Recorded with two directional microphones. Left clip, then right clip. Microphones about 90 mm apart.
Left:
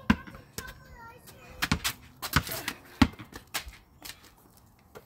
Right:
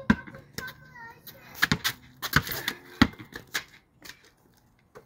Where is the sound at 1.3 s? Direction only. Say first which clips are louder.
Right 5 dB; 20° right (ahead or behind).